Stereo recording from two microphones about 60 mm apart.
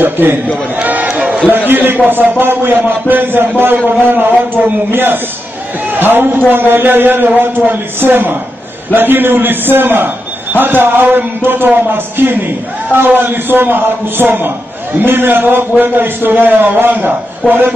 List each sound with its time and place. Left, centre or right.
0.0 s a man's voice: right
0.7 s run: right
1.5 s a man's voice: right